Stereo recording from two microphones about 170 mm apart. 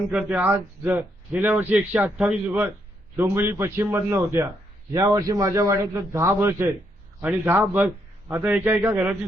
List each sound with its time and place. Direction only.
0.1 s a man's voice: 5° right (ahead or behind)